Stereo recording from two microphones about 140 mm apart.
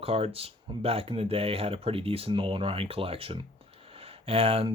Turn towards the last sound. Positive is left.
turn(degrees=-45)  # may be behind; listen again after turning